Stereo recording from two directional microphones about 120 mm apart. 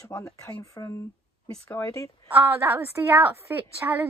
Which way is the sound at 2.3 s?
20° right (ahead or behind).